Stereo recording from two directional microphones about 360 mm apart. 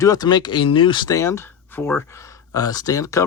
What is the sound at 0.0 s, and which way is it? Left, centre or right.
Speech, centre.